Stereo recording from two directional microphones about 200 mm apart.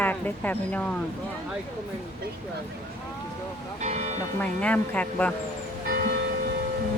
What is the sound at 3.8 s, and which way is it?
Music, 35° right (ahead or behind).